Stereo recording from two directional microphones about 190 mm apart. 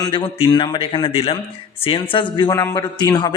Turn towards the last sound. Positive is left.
turn(degrees=20)  # may be behind; listen again after turning